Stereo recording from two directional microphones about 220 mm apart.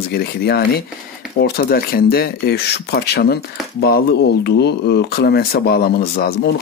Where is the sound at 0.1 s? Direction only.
45° left (ahead or behind).